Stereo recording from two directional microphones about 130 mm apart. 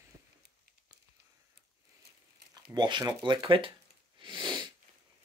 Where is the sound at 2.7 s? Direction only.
35° right (ahead or behind).